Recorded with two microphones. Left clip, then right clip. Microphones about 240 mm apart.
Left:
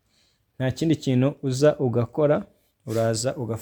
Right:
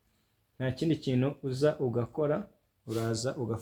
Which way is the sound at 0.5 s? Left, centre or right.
Left.